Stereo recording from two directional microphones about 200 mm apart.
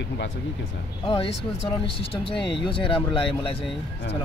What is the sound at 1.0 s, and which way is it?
Speech, 25° left (ahead or behind).